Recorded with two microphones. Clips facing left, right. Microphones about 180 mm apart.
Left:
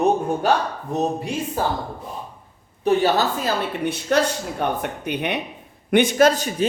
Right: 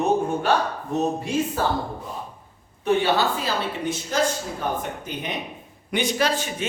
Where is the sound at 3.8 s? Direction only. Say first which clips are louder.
Left 5 dB; 65° left (ahead or behind).